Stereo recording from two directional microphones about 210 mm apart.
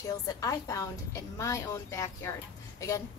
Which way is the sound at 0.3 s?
15° left (ahead or behind).